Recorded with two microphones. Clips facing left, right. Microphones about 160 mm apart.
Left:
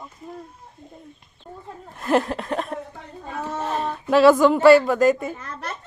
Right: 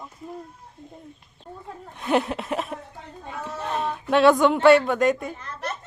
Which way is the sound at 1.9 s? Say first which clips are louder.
Left 2 dB; centre (ahead or behind).